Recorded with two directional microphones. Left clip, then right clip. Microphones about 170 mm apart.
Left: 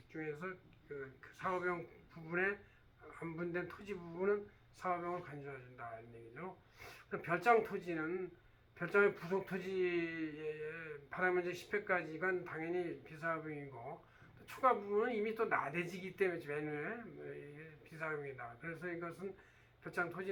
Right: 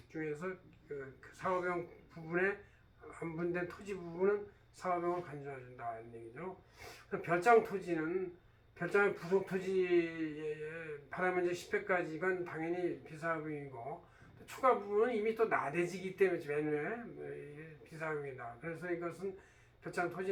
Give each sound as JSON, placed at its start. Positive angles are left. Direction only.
{"t": 0.1, "sound": "a man's voice", "side_deg": 15}
{"t": 17.9, "sound": "a man's voice", "side_deg": 20}